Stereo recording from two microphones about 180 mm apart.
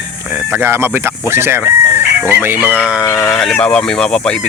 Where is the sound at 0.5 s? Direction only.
15° right (ahead or behind).